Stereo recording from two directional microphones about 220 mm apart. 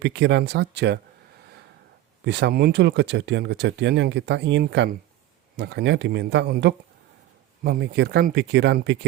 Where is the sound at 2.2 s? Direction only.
50° right (ahead or behind).